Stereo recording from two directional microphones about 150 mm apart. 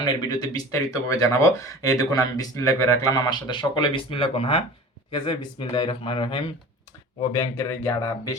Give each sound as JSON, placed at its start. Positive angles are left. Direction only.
{"t": 0.0, "sound": "speech", "side_deg": 30}
{"t": 7.3, "sound": "speech", "side_deg": 15}